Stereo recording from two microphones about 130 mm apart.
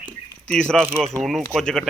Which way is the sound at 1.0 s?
Centre (ahead or behind).